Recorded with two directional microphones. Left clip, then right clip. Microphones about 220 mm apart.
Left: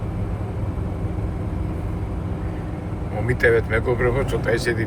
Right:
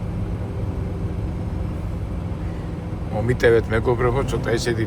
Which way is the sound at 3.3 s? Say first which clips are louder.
Right 1 dB; 20° right (ahead or behind).